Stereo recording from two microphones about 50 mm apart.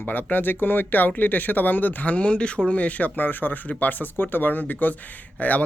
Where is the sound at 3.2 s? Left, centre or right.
Left.